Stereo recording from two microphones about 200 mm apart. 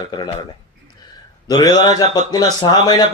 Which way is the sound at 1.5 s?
20° left (ahead or behind).